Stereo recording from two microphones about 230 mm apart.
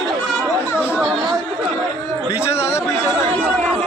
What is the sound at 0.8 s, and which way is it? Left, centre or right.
Chatter, centre.